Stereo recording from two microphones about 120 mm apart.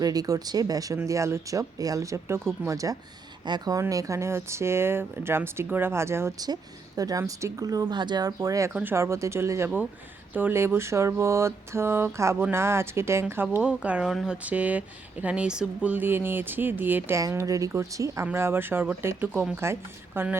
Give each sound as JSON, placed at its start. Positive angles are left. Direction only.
{"t": 0.0, "sound": "speech", "side_deg": -30}
{"t": 8.7, "sound": "speech", "side_deg": -15}
{"t": 17.2, "sound": "speech", "side_deg": -30}